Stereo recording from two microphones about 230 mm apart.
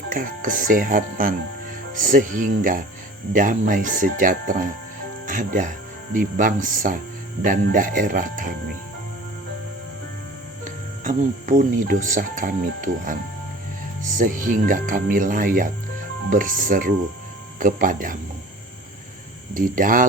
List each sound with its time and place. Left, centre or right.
0.1 s speech: right
10.6 s speech: right
19.5 s speech: right